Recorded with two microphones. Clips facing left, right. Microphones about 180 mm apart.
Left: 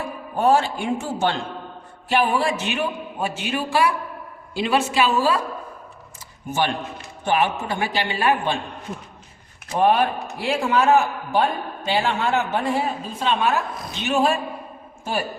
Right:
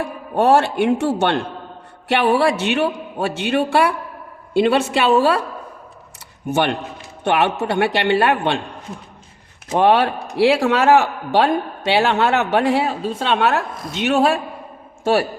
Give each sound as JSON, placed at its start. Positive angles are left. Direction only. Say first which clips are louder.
{"t": 0.0, "sound": "a man's voice", "louder": "right 3 dB", "side_deg": -70}
{"t": 6.5, "sound": "a woman's voice", "louder": "right 4 dB", "side_deg": -65}
{"t": 9.7, "sound": "a man's voice", "louder": "right 3 dB", "side_deg": -75}